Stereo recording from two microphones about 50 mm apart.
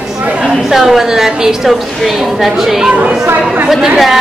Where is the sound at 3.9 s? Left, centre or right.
Centre.